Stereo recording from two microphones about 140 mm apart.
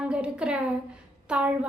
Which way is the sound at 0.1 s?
5° right (ahead or behind).